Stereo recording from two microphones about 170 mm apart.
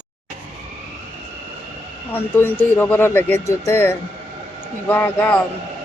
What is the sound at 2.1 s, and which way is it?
Speech, 10° left (ahead or behind).